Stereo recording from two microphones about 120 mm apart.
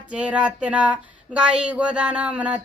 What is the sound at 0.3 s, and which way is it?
Speech, 10° right (ahead or behind).